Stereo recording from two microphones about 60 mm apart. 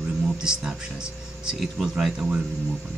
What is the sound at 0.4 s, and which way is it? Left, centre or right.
Speech, centre.